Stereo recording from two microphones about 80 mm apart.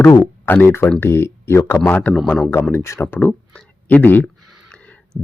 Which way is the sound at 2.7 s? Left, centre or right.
Left.